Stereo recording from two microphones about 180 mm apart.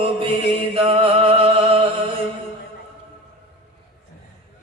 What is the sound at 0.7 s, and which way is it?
Music, 35° right (ahead or behind).